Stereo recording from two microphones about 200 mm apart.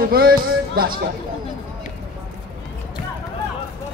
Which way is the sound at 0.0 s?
50° right (ahead or behind).